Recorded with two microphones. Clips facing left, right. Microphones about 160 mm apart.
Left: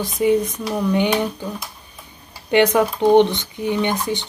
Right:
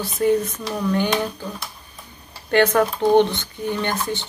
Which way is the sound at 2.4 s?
15° left (ahead or behind).